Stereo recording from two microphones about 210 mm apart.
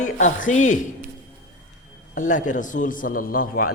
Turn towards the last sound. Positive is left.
turn(degrees=40)  # may be behind; listen again after turning